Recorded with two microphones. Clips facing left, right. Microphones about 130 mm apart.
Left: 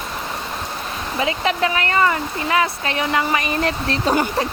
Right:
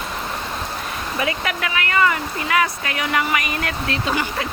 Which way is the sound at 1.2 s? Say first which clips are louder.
Left 5 dB; 25° left (ahead or behind).